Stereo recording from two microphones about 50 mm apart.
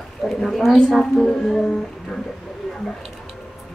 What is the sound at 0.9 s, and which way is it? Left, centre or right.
Speech, centre.